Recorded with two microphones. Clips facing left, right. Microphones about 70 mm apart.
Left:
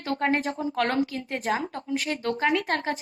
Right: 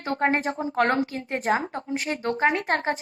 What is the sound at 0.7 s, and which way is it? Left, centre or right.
A woman's voice, right.